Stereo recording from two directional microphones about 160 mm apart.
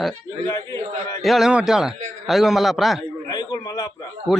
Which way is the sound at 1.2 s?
Centre (ahead or behind).